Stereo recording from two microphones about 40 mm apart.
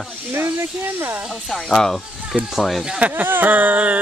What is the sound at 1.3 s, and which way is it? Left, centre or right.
Speech, centre.